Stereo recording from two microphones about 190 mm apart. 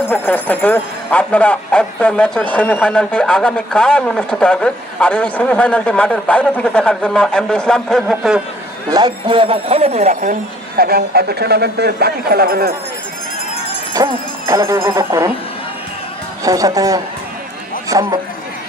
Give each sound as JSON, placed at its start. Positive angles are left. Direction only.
{"t": 0.1, "sound": "speech", "side_deg": 10}
{"t": 8.9, "sound": "speech", "side_deg": -20}
{"t": 10.8, "sound": "speech", "side_deg": -55}
{"t": 13.9, "sound": "speech", "side_deg": -15}
{"t": 16.4, "sound": "a man's voice", "side_deg": -20}